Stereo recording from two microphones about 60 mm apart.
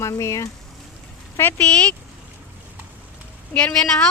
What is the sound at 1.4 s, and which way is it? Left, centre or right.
Speech, left.